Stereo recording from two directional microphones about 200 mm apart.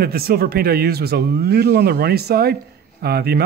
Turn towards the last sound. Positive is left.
turn(degrees=-50)  # may be behind; listen again after turning